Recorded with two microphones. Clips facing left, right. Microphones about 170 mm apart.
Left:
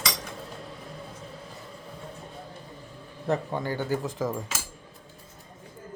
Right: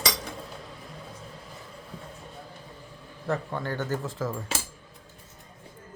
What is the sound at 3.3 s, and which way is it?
Speech, 15° left (ahead or behind).